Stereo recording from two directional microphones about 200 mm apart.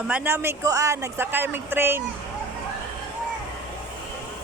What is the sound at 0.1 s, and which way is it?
Speech, 10° right (ahead or behind).